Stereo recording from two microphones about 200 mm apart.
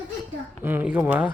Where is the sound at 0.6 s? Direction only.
10° right (ahead or behind).